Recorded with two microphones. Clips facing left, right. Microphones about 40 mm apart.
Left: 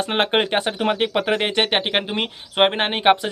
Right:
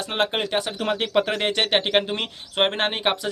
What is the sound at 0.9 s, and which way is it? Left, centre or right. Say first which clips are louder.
Speech: left 1 dB; centre.